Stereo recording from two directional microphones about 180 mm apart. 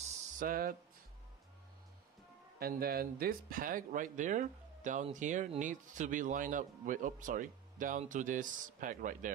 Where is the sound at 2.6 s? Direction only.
55° right (ahead or behind).